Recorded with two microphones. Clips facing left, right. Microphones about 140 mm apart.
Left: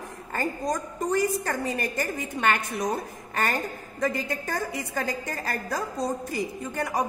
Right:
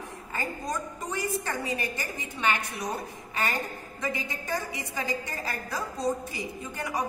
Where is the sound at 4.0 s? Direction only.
50° left (ahead or behind).